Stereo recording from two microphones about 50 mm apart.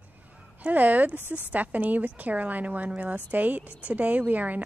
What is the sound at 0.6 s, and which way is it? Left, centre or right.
Speech, right.